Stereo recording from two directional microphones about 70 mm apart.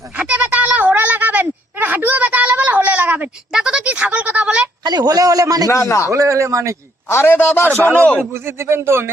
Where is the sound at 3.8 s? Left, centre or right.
Right.